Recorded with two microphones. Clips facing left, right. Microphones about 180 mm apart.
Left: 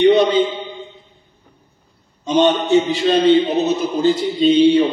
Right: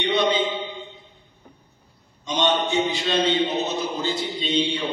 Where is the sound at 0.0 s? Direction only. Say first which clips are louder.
Left 9 dB; 40° left (ahead or behind).